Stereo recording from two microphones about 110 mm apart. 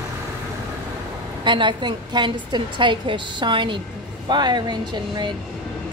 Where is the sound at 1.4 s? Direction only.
45° right (ahead or behind).